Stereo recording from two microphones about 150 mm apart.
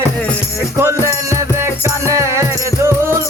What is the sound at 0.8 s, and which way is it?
Music, 20° right (ahead or behind).